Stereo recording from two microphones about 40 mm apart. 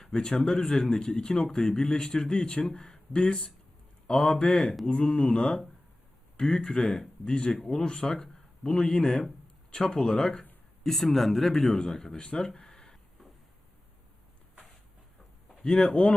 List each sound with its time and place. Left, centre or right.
0.2 s speech: centre
10.8 s speech: centre
12.1 s speech: left
12.5 s a sound: centre
15.6 s speech: left